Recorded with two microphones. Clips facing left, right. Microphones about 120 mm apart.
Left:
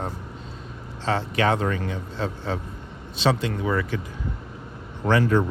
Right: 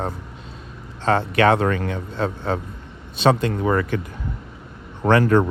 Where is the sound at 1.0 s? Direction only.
55° right (ahead or behind).